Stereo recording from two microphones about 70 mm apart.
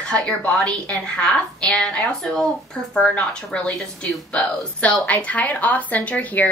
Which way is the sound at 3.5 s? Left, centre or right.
Centre.